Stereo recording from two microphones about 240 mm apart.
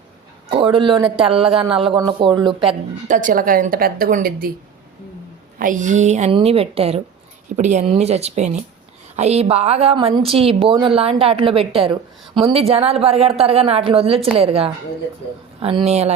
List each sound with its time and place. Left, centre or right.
0.5 s a woman's voice: right
5.5 s a woman's voice: right